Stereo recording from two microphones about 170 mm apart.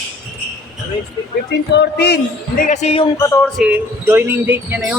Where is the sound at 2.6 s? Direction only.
40° left (ahead or behind).